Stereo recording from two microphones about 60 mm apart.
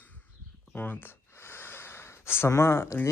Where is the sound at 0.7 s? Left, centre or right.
Left.